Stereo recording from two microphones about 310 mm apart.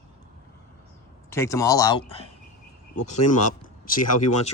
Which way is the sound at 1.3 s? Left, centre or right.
Centre.